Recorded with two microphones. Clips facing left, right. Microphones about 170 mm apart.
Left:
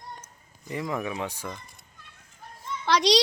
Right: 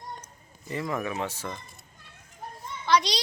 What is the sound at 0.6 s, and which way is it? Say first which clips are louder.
Speech: even; 15° left (ahead or behind).